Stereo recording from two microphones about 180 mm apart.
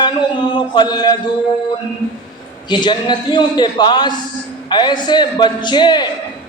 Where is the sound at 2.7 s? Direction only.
25° left (ahead or behind).